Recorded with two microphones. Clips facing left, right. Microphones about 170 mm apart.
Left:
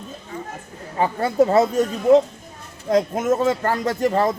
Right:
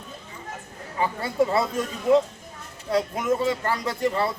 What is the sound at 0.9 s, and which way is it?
Speech, 45° left (ahead or behind).